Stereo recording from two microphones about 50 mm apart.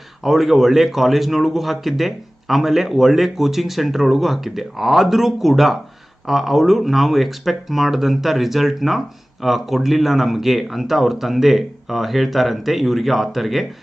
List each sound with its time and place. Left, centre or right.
0.2 s a man's voice: centre